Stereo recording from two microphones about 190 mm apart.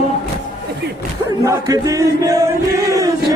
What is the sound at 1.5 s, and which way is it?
Chant, 20° right (ahead or behind).